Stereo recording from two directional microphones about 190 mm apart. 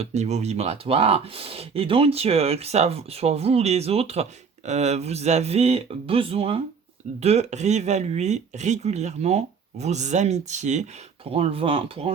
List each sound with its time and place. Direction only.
0.0 s speech: 35° right (ahead or behind)